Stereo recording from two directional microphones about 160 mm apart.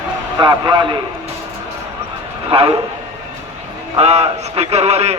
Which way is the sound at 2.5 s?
35° right (ahead or behind).